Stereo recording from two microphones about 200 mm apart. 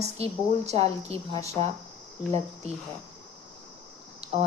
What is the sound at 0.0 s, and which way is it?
Speech, 35° right (ahead or behind).